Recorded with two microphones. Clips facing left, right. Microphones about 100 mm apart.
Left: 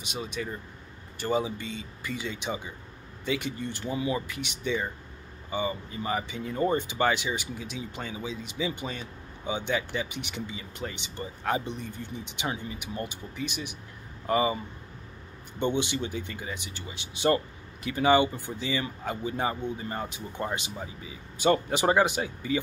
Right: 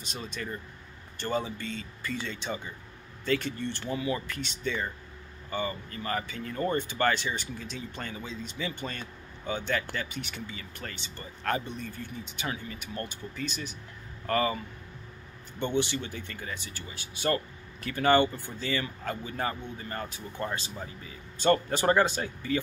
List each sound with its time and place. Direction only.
0.1 s speech: 10° left (ahead or behind)
15.6 s speech: 15° left (ahead or behind)